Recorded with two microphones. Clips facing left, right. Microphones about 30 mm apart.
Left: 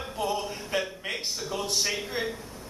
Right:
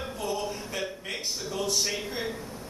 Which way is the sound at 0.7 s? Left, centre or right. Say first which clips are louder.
Left 6 dB; left.